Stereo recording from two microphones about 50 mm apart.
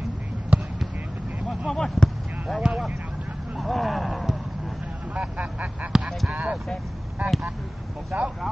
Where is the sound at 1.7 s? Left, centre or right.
Centre.